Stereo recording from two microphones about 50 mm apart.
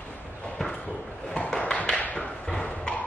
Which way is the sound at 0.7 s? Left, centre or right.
Left.